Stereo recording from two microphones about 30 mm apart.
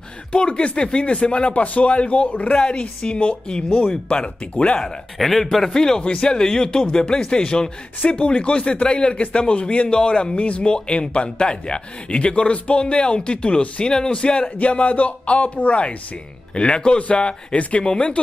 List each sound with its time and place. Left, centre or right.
0.3 s a man's voice: left
1.5 s speech: left
4.1 s speech: left
5.2 s a man's voice: centre
6.0 s speech: left
8.2 s a man's voice: left
10.3 s speech: left
10.6 s a man's voice: left
14.6 s speech: left
16.5 s a man's voice: left
17.6 s speech: left
17.8 s a man's voice: left